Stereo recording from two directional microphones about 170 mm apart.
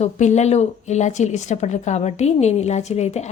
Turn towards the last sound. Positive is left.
turn(degrees=40)  # may be behind; listen again after turning